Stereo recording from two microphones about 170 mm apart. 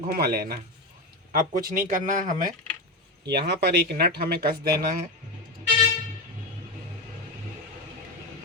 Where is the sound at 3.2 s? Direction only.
75° right (ahead or behind); by 5.0 s 60° right (ahead or behind).